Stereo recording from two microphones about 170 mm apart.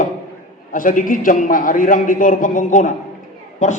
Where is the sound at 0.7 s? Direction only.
50° left (ahead or behind).